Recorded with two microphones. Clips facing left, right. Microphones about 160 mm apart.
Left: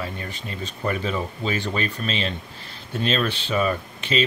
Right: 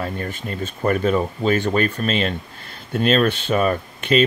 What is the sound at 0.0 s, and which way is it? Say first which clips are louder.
Speech: right 5 dB; 50° right (ahead or behind).